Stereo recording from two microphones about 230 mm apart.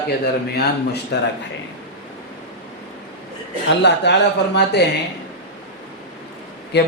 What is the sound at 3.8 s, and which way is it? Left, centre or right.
A man's voice, left.